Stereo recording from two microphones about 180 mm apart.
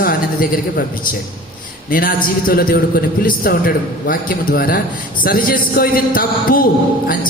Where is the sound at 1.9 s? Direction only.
50° left (ahead or behind).